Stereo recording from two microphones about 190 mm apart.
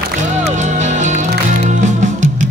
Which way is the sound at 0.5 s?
40° right (ahead or behind).